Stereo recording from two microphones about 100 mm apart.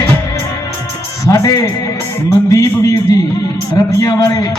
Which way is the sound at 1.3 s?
35° left (ahead or behind).